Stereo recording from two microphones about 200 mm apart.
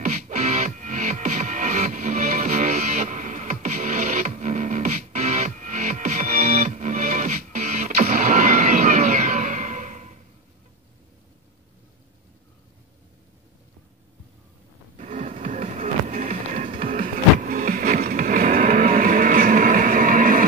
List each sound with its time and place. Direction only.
0.0 s music: 40° right (ahead or behind)
15.0 s a sound: 40° right (ahead or behind)
15.3 s music: 40° right (ahead or behind)